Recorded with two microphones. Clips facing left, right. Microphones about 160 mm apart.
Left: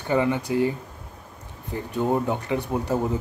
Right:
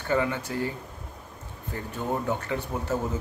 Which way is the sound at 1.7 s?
15° left (ahead or behind).